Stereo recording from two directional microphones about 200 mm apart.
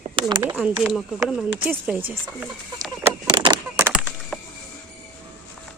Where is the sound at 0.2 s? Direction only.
25° right (ahead or behind).